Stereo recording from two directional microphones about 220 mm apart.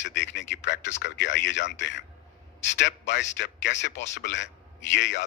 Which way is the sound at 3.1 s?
55° left (ahead or behind).